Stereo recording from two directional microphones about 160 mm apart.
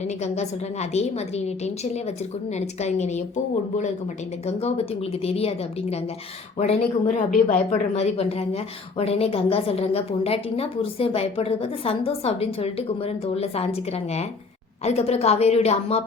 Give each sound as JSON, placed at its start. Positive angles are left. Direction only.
{"t": 0.0, "sound": "a woman's voice", "side_deg": 45}
{"t": 5.2, "sound": "a woman's voice", "side_deg": 40}